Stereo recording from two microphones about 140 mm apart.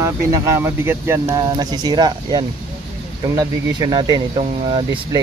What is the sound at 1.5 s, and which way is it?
Speech, 30° right (ahead or behind).